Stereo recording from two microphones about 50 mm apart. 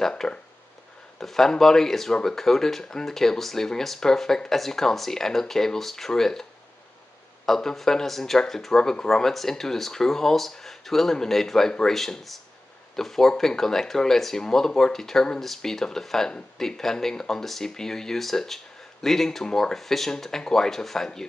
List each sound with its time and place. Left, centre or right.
0.1 s speech: centre
1.2 s speech: centre
7.4 s speech: centre